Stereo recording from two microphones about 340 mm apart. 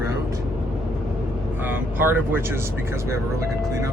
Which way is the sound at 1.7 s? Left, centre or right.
Centre.